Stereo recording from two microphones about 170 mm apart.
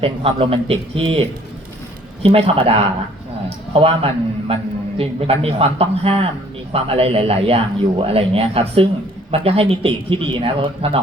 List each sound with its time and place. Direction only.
0.0 s speech: 35° right (ahead or behind)